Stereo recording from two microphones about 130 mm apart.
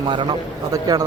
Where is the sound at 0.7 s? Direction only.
30° right (ahead or behind).